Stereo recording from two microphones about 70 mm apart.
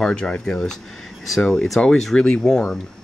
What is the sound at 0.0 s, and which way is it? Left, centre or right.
Speech, centre.